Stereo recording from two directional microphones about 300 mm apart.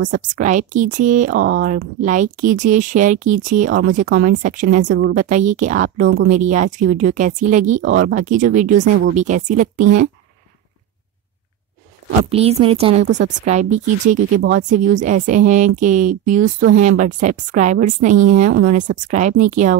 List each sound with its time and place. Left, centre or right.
0.1 s speech: right
4.8 s a woman's voice: right
5.1 s speech: right
12.3 s speech: centre
18.5 s a woman's voice: right
18.8 s speech: right